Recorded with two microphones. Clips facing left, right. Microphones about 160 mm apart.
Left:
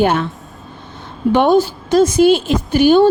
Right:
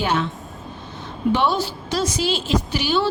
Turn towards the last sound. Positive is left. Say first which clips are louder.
# left 11 dB
turn(degrees=50)  # may be behind; listen again after turning